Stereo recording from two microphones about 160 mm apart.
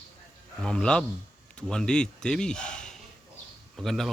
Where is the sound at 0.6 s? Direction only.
5° left (ahead or behind).